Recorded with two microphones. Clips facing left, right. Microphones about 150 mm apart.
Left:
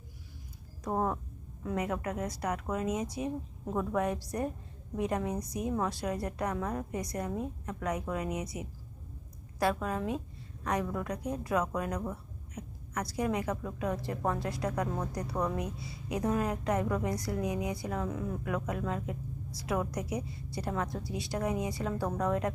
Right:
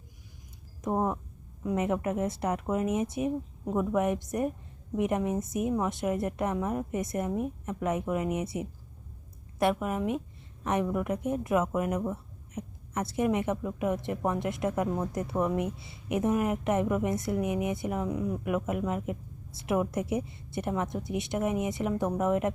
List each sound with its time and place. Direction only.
0.9 s a woman's voice: 15° right (ahead or behind)